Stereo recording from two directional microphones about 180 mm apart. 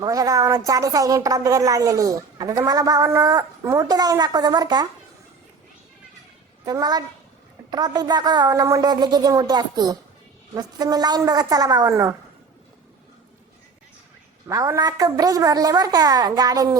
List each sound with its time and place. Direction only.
0.0 s a woman's voice: 20° right (ahead or behind)
6.7 s a woman's voice: 20° right (ahead or behind)
14.4 s a woman's voice: 20° right (ahead or behind)